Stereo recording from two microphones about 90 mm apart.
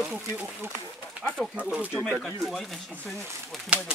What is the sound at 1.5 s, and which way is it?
Speech, 10° right (ahead or behind).